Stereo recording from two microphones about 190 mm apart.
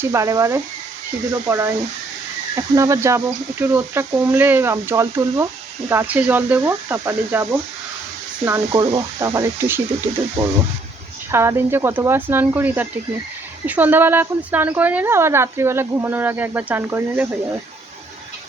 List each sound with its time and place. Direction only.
0.0 s a woman's voice: 15° right (ahead or behind)
8.4 s a woman's voice: 15° right (ahead or behind)
10.4 s speech: 30° right (ahead or behind)
11.3 s a woman's voice: 15° right (ahead or behind)